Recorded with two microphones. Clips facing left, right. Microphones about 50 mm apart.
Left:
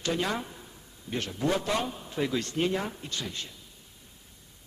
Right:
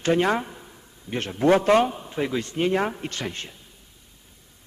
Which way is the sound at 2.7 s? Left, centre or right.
Right.